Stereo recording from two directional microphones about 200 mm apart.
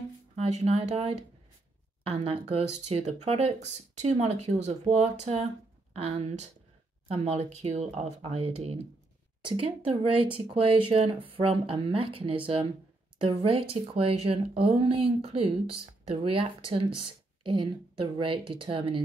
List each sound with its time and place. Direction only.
0.4 s speech: 30° right (ahead or behind)